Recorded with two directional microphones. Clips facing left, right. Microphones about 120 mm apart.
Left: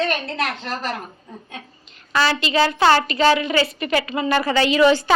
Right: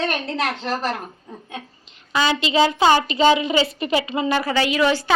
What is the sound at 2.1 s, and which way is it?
A woman's voice, 20° right (ahead or behind).